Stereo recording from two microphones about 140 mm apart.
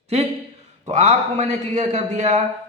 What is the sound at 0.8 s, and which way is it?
A man's voice, 55° right (ahead or behind).